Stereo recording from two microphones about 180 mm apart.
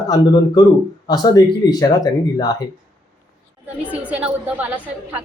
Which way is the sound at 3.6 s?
10° right (ahead or behind).